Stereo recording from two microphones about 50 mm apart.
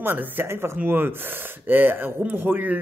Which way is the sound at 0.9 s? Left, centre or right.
Right.